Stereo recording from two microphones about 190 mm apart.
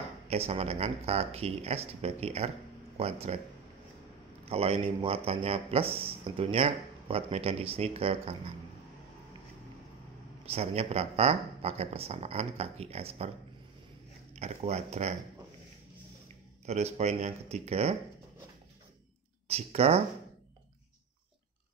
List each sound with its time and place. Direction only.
0.3 s a man's voice: 35° right (ahead or behind)
4.5 s a man's voice: 30° right (ahead or behind)
10.4 s a man's voice: 35° right (ahead or behind)
14.3 s a man's voice: 35° right (ahead or behind)
16.6 s a man's voice: 35° right (ahead or behind)
19.4 s speech: 30° right (ahead or behind)